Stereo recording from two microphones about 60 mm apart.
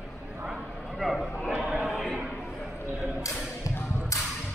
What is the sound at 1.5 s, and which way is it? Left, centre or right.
Chatter, centre.